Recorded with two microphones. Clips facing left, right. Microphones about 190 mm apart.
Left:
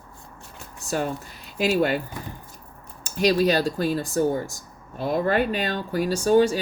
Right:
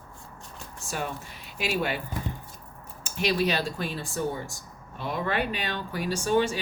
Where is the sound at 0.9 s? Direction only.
40° left (ahead or behind).